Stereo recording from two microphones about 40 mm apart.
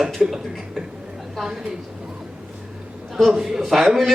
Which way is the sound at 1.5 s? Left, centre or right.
Centre.